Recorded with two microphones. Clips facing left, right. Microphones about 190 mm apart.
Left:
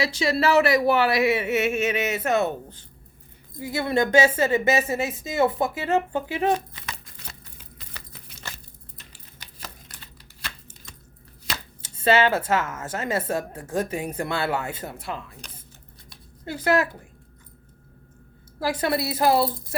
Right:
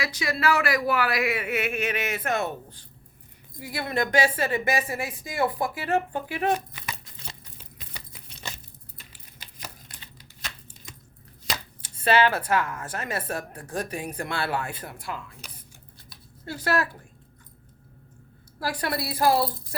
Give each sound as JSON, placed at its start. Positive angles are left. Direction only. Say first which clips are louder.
{"t": 0.0, "sound": "speech", "louder": "left 4 dB", "side_deg": 25}
{"t": 11.8, "sound": "speech", "louder": "left 2 dB", "side_deg": 25}
{"t": 15.4, "sound": "a sound", "louder": "left 1 dB", "side_deg": -5}
{"t": 16.5, "sound": "speech", "louder": "left 4 dB", "side_deg": 20}
{"t": 18.6, "sound": "speech", "louder": "left 5 dB", "side_deg": 20}